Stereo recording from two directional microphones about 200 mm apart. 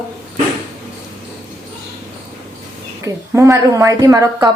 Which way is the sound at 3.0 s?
15° right (ahead or behind).